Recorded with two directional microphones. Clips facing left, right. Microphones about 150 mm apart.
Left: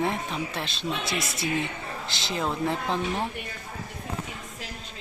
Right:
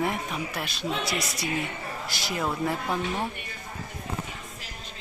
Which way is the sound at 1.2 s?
Centre (ahead or behind).